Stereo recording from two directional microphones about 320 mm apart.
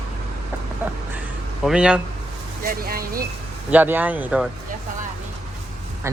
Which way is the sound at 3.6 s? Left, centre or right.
Centre.